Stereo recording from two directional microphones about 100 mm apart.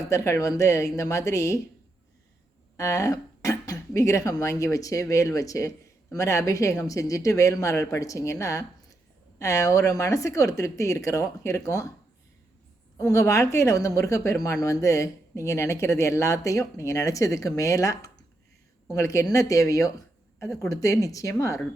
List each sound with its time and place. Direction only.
0.1 s speech: 30° left (ahead or behind)
2.7 s speech: 30° left (ahead or behind)
13.0 s speech: 35° left (ahead or behind)